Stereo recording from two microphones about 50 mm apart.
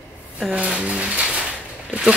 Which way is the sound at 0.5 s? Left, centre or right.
Right.